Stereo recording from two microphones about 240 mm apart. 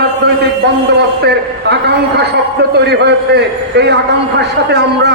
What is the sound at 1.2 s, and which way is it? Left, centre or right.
A man's voice, right.